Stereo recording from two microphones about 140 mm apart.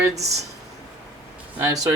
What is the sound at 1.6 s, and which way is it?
Speech, 25° right (ahead or behind).